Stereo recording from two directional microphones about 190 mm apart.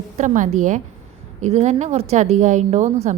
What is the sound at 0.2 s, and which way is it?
A woman's voice, 40° right (ahead or behind).